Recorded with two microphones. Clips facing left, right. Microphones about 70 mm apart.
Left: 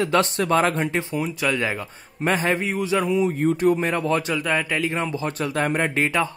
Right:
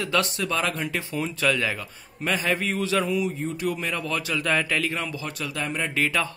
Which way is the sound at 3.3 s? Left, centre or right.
Left.